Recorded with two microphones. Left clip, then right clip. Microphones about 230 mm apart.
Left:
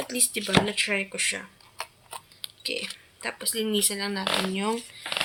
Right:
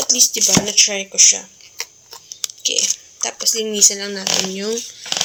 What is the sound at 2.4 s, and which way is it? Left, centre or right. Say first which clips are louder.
Whispering: right 14 dB; right.